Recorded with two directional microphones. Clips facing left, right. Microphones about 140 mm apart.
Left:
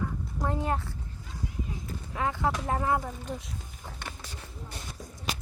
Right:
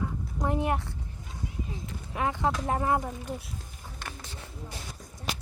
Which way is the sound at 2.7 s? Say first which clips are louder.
Right 1 dB; 20° right (ahead or behind).